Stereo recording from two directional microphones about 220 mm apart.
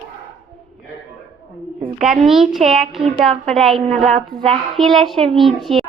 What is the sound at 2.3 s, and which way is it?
A child's voice, centre (ahead or behind).